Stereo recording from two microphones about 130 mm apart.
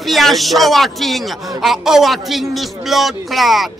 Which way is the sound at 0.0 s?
Centre (ahead or behind).